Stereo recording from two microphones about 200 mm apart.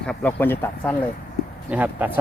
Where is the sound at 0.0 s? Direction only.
5° left (ahead or behind).